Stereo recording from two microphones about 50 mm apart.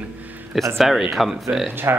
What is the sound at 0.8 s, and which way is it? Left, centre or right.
Speech, centre.